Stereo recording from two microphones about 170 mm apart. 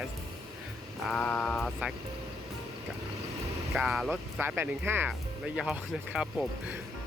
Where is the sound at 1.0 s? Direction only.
5° left (ahead or behind).